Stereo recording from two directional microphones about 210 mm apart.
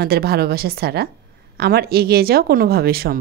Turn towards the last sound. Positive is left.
turn(degrees=-45)  # may be behind; listen again after turning